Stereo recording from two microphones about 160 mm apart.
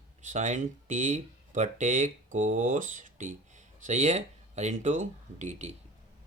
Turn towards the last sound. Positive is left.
turn(degrees=-45)  # may be behind; listen again after turning